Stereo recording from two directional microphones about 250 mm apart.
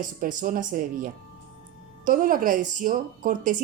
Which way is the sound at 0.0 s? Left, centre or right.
Right.